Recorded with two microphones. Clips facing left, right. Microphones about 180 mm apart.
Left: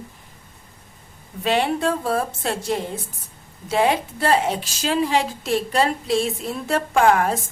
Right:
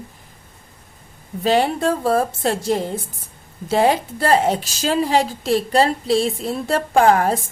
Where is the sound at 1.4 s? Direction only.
40° right (ahead or behind).